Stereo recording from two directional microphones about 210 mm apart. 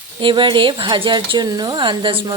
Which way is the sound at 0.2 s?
20° right (ahead or behind).